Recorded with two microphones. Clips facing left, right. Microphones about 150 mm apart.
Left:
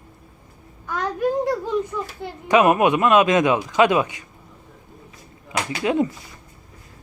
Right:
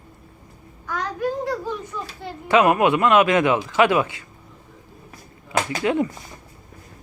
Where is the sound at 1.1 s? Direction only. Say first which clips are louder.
Left 4 dB; 15° left (ahead or behind).